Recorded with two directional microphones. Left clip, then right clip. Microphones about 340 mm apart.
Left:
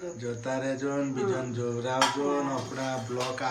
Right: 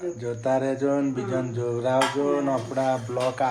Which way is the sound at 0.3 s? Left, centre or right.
Centre.